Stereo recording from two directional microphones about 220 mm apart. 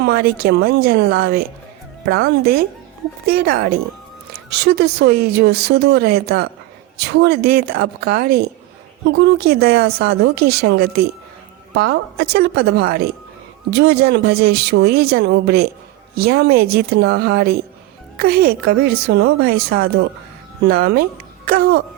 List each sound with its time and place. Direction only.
0.0 s speech: 45° right (ahead or behind)